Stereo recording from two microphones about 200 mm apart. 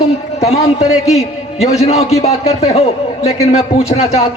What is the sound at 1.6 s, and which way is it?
A man's voice, 30° left (ahead or behind).